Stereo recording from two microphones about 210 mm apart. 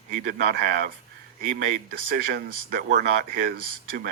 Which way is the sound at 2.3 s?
45° right (ahead or behind).